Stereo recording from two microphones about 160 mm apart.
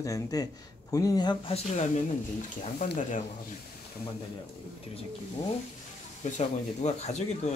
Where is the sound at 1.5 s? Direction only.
45° left (ahead or behind).